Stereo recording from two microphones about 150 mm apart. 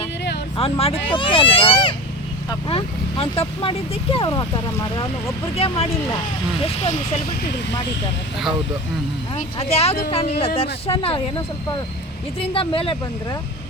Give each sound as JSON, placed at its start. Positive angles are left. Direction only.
{"t": 0.5, "sound": "speech", "side_deg": 40}
{"t": 5.5, "sound": "speech", "side_deg": 40}
{"t": 9.3, "sound": "speech", "side_deg": 45}
{"t": 12.4, "sound": "speech", "side_deg": 35}